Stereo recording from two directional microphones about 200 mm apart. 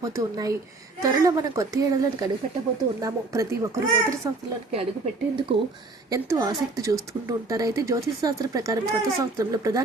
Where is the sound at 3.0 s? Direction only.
15° right (ahead or behind).